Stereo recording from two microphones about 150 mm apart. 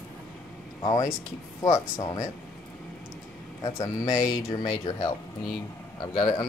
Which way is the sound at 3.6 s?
25° left (ahead or behind).